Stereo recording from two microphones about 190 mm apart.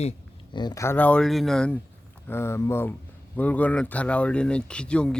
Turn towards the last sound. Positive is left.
turn(degrees=5)  # may be behind; listen again after turning